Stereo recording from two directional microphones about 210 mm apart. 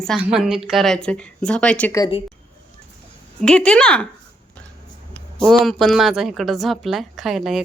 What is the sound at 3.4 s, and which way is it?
Speech, 5° left (ahead or behind).